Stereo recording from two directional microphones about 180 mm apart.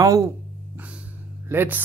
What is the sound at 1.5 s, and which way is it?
Speech, 10° right (ahead or behind).